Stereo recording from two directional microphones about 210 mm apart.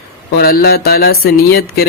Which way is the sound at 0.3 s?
45° left (ahead or behind).